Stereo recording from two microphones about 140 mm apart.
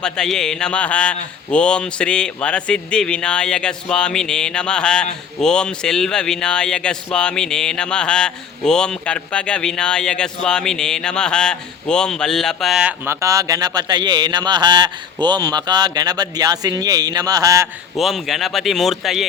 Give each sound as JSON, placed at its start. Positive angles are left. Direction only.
{"t": 0.0, "sound": "a man's voice", "side_deg": 5}
{"t": 13.1, "sound": "speech", "side_deg": -20}
{"t": 17.9, "sound": "a man's voice", "side_deg": 0}